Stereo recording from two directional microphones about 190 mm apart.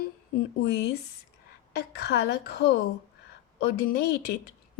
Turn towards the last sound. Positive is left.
turn(degrees=55)  # may be behind; listen again after turning